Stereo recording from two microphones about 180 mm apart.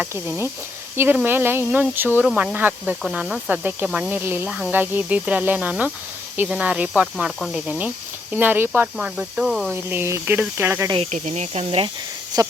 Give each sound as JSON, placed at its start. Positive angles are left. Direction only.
{"t": 0.0, "sound": "speech", "side_deg": -10}
{"t": 10.9, "sound": "speech", "side_deg": -40}
{"t": 12.3, "sound": "speech", "side_deg": -20}